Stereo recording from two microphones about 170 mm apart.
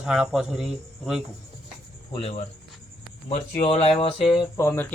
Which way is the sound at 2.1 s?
35° left (ahead or behind).